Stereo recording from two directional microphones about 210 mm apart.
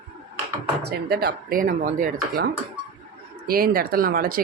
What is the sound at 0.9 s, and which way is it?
Speech, 50° right (ahead or behind).